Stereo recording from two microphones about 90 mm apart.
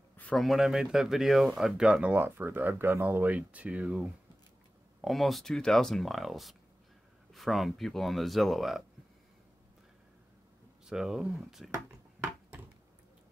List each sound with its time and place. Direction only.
0.4 s speech: centre (ahead or behind)
5.0 s speech: centre (ahead or behind)
10.9 s speech: 5° right (ahead or behind)